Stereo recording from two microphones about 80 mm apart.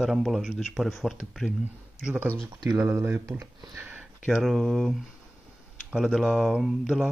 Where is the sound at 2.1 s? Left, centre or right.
Right.